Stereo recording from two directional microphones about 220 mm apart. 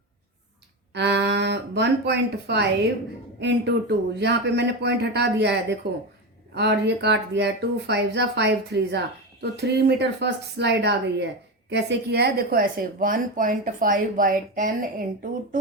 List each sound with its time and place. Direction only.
0.9 s a woman's voice: 50° right (ahead or behind)